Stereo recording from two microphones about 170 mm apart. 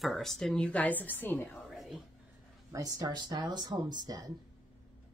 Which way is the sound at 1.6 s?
Centre (ahead or behind).